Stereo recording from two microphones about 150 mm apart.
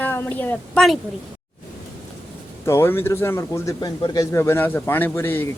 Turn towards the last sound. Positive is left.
turn(degrees=15)  # may be behind; listen again after turning